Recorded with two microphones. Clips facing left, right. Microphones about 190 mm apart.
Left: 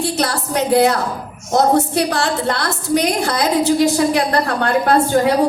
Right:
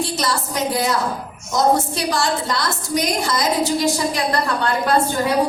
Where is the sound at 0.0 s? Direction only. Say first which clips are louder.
Left 3 dB; 65° left (ahead or behind).